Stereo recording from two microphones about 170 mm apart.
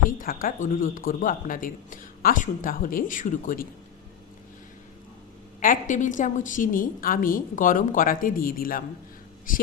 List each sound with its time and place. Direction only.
0.0 s speech: 55° left (ahead or behind)
5.5 s speech: 50° left (ahead or behind)